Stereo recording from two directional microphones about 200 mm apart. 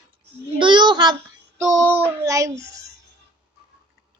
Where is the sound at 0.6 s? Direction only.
25° right (ahead or behind).